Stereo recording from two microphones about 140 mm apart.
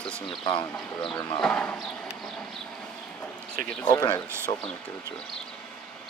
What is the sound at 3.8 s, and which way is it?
Speech, 30° left (ahead or behind).